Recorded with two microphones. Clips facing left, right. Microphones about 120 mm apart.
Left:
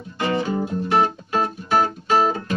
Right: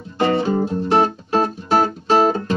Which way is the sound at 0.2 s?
35° right (ahead or behind).